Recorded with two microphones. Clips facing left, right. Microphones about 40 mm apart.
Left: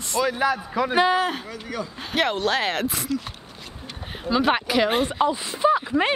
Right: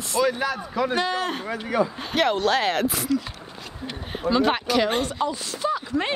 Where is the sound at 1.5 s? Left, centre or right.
Right.